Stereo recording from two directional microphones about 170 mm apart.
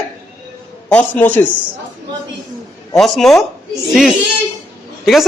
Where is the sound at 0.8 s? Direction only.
10° left (ahead or behind).